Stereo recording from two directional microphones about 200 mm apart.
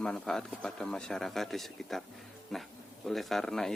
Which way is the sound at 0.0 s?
5° left (ahead or behind).